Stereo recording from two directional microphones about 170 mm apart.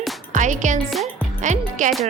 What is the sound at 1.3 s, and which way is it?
Speech, 45° right (ahead or behind).